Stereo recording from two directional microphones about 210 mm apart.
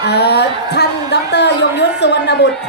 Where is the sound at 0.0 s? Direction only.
50° left (ahead or behind).